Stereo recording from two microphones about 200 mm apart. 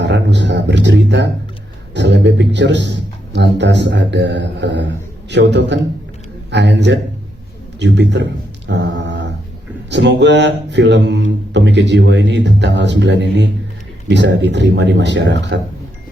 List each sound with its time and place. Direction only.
0.0 s a man's voice: 60° right (ahead or behind)
7.8 s a sound: 60° right (ahead or behind)
9.9 s a man's voice: 60° right (ahead or behind)